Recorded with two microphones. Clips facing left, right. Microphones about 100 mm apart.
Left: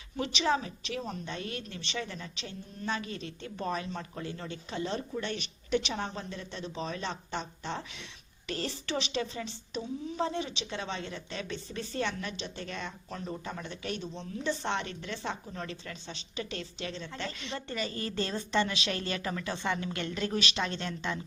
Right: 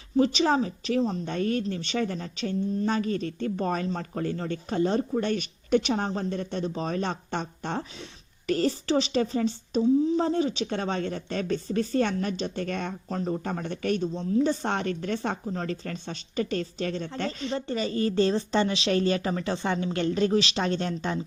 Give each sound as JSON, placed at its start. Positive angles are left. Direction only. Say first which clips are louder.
{"t": 0.2, "sound": "a woman's voice", "louder": "right 7 dB", "side_deg": -40}
{"t": 1.2, "sound": "a woman's voice", "louder": "right 11 dB", "side_deg": -45}